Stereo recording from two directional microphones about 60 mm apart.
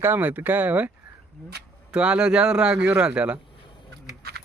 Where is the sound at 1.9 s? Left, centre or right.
Centre.